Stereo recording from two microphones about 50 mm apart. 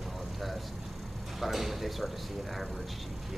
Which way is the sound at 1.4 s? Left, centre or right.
Centre.